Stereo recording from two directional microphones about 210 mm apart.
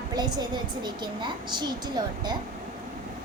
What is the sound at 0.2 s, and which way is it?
A woman's voice, 20° right (ahead or behind).